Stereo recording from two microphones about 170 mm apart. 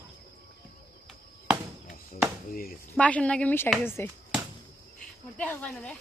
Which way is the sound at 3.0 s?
5° left (ahead or behind).